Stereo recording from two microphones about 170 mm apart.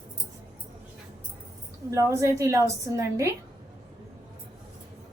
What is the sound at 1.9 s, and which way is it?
A woman's voice, 20° right (ahead or behind).